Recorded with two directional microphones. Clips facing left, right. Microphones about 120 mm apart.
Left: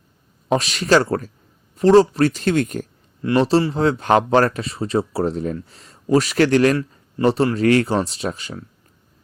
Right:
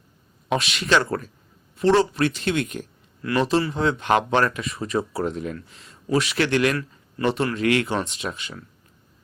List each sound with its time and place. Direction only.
0.4 s speech: 35° left (ahead or behind)
3.2 s speech: 30° left (ahead or behind)